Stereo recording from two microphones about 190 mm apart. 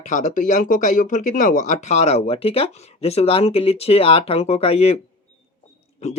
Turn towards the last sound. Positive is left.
turn(degrees=35)  # may be behind; listen again after turning